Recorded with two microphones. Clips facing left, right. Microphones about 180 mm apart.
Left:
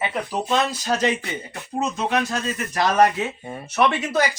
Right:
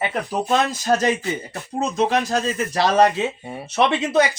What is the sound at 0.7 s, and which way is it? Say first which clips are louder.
Speech: right 3 dB; 45° right (ahead or behind).